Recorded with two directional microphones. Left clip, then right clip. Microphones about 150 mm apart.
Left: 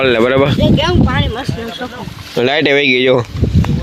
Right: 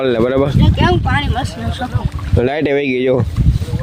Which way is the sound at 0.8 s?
55° right (ahead or behind).